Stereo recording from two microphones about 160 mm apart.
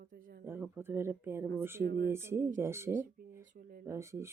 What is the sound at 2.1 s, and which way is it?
Speech, 15° right (ahead or behind).